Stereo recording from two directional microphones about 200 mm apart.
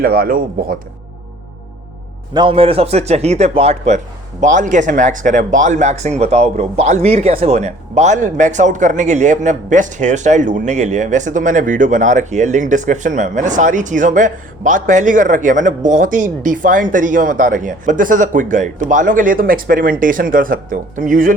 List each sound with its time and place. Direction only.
0.0 s speech: 45° right (ahead or behind)
2.3 s a man's voice: 25° right (ahead or behind); by 21.3 s 40° right (ahead or behind)